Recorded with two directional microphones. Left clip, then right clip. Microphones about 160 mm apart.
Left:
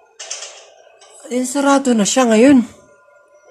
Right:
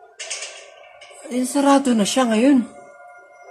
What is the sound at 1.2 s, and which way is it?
Speech, 15° left (ahead or behind).